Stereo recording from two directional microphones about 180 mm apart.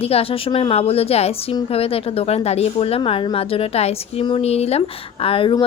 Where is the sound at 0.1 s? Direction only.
30° left (ahead or behind).